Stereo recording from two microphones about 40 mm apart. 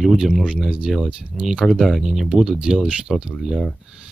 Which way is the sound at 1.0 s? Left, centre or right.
Right.